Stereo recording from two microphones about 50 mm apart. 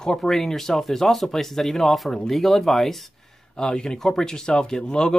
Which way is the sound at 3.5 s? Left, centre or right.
Centre.